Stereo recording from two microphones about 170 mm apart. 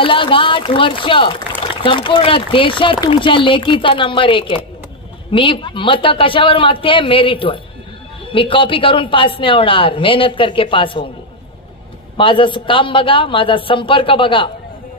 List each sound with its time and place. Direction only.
0.0 s speech: 30° left (ahead or behind)
12.2 s speech: 30° left (ahead or behind)